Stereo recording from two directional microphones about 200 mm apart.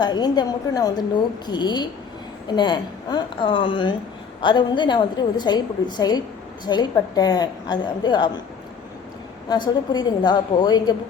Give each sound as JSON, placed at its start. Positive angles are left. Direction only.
{"t": 0.0, "sound": "a woman's voice", "side_deg": 20}
{"t": 9.5, "sound": "a woman's voice", "side_deg": 20}